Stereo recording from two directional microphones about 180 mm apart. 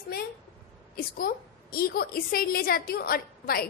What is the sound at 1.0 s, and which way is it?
A woman's voice, 55° left (ahead or behind).